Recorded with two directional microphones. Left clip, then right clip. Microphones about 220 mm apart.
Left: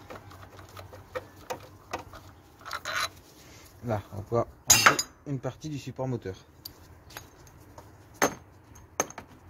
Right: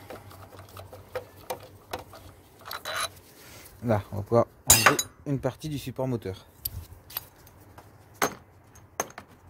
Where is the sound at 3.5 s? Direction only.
55° right (ahead or behind).